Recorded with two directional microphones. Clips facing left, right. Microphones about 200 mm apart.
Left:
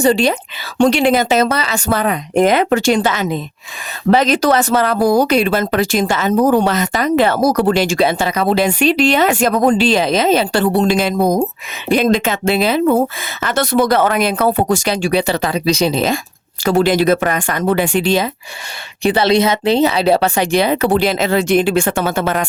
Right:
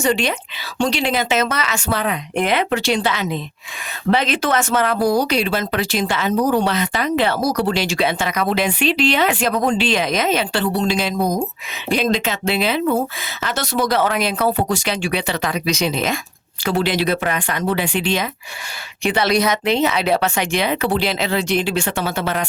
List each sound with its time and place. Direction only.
0.0 s speech: 35° left (ahead or behind)
0.8 s speech: 50° left (ahead or behind)
13.4 s speech: 55° left (ahead or behind); by 16.2 s 35° left (ahead or behind)
16.6 s speech: 45° left (ahead or behind)
20.9 s speech: 45° left (ahead or behind)